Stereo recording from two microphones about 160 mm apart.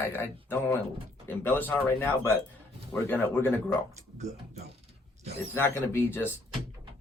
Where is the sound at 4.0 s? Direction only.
45° right (ahead or behind).